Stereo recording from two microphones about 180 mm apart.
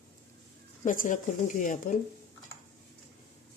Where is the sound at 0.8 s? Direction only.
45° left (ahead or behind).